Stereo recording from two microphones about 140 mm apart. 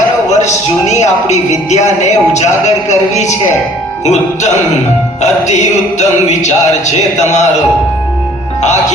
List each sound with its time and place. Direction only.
0.3 s speech: 55° left (ahead or behind)